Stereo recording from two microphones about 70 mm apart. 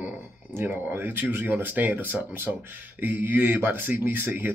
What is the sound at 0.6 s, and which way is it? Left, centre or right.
Speech, right.